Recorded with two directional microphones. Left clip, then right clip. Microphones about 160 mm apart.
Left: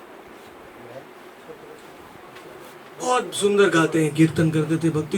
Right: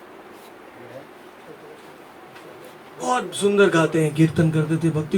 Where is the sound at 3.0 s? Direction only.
Centre (ahead or behind).